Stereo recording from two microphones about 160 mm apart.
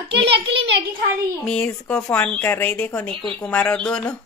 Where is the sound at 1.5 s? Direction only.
5° left (ahead or behind).